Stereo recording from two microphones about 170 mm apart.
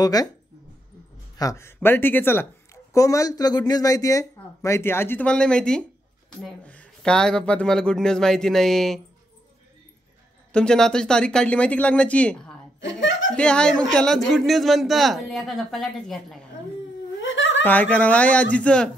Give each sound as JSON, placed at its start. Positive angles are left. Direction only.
{"t": 0.0, "sound": "speech", "side_deg": 20}
{"t": 1.4, "sound": "a man's voice", "side_deg": 15}
{"t": 10.5, "sound": "a man's voice", "side_deg": 5}
{"t": 12.8, "sound": "laughter", "side_deg": 90}
{"t": 13.4, "sound": "a man's voice", "side_deg": 5}
{"t": 17.2, "sound": "giggle", "side_deg": 90}
{"t": 17.6, "sound": "speech", "side_deg": 10}